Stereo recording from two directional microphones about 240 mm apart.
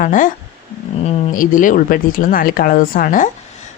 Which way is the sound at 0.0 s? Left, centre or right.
Left.